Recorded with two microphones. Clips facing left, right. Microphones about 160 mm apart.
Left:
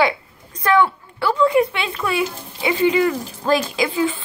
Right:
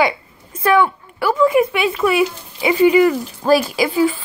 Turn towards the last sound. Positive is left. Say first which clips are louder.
# right 4 dB
turn(degrees=-5)  # may be behind; listen again after turning